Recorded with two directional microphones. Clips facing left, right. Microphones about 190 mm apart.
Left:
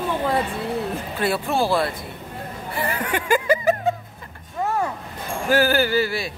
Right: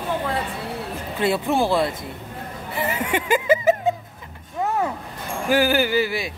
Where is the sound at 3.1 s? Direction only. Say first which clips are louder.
Right 1 dB; 20° right (ahead or behind).